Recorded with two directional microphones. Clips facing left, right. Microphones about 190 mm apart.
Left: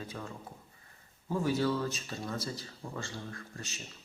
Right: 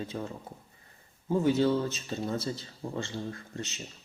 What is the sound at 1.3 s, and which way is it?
Speech, 20° right (ahead or behind).